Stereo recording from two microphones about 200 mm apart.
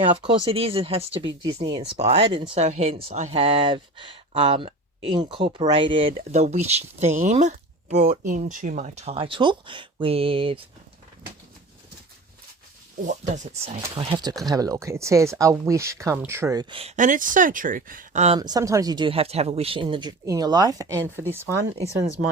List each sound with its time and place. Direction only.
0.0 s speech: 25° right (ahead or behind)
13.1 s speech: 40° right (ahead or behind)
13.9 s speech: 25° right (ahead or behind)
18.3 s speech: 20° right (ahead or behind)